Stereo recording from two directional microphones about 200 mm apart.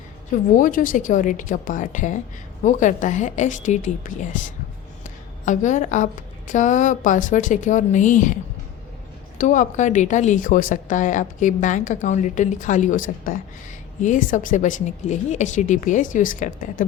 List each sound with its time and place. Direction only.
0.5 s speech: 40° left (ahead or behind)
5.5 s speech: 40° left (ahead or behind)
9.4 s speech: 40° left (ahead or behind)